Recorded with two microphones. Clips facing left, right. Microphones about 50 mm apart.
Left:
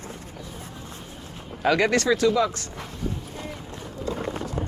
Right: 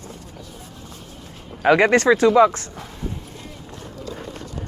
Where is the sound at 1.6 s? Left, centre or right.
Right.